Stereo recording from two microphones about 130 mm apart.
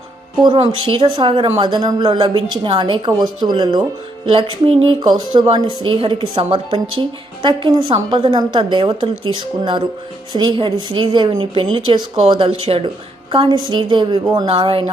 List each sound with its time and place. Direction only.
0.4 s a woman's voice: 40° right (ahead or behind)
14.4 s a woman's voice: 45° right (ahead or behind)